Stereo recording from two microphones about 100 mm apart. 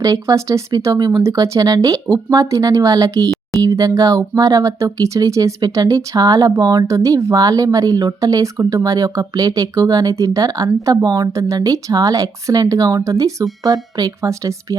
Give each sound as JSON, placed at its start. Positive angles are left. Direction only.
{"t": 0.0, "sound": "speech", "side_deg": -35}